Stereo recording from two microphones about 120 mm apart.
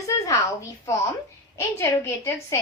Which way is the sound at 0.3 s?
25° left (ahead or behind).